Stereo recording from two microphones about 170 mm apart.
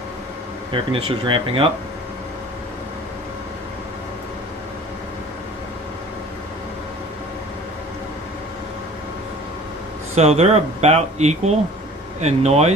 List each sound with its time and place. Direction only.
0.7 s speech: 30° right (ahead or behind)
10.1 s speech: 40° right (ahead or behind)